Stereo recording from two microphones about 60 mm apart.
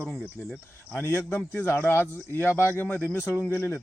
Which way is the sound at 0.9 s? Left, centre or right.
Left.